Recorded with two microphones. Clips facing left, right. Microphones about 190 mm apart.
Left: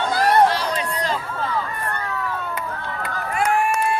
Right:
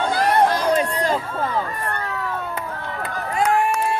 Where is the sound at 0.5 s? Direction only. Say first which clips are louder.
Right 5 dB; 45° right (ahead or behind).